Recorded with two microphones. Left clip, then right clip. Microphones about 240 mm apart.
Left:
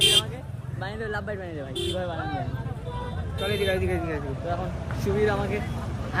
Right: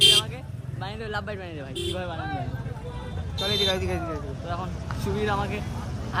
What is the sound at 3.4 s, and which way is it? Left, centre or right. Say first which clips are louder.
Speech: right 1 dB; right.